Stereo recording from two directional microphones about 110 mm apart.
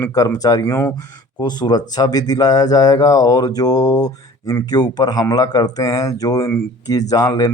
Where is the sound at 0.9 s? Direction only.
35° left (ahead or behind).